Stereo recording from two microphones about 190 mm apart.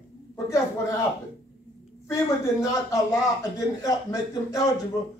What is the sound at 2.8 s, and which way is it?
A man's voice, 15° left (ahead or behind).